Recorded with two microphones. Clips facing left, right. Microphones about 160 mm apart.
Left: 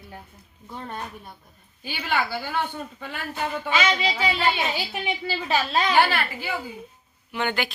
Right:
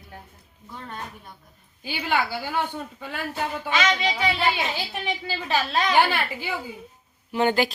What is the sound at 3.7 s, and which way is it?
A woman's voice, 10° left (ahead or behind).